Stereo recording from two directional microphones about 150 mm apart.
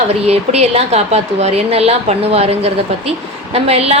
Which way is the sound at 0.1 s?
45° right (ahead or behind).